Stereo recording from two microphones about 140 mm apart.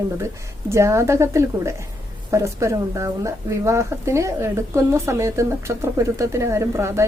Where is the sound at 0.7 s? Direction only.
20° right (ahead or behind).